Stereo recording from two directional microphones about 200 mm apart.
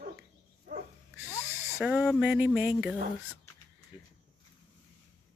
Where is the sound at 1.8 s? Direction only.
5° right (ahead or behind).